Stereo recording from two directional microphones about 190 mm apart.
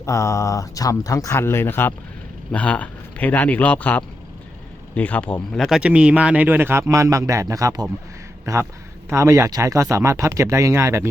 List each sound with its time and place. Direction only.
0.0 s speech: 15° left (ahead or behind); by 11.1 s 15° right (ahead or behind)